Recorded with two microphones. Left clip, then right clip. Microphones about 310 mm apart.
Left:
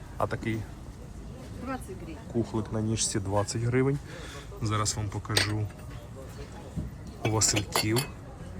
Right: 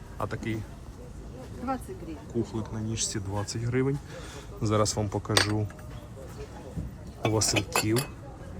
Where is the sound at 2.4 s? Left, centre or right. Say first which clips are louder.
Left 3 dB; centre.